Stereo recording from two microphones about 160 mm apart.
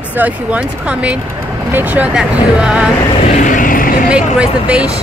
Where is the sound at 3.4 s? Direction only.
55° left (ahead or behind).